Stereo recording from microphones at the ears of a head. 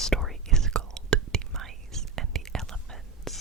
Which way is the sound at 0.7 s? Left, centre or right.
Right.